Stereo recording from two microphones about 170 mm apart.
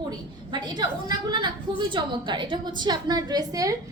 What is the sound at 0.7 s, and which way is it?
A woman's voice, 25° right (ahead or behind).